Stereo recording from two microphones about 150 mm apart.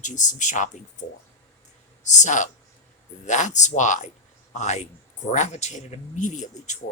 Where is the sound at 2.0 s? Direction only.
55° left (ahead or behind).